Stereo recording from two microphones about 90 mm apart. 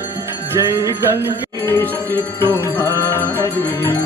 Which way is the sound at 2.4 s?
25° left (ahead or behind).